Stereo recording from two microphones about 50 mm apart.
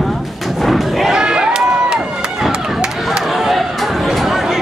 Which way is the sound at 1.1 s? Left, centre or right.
Centre.